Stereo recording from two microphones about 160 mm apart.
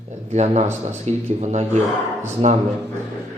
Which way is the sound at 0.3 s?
45° right (ahead or behind).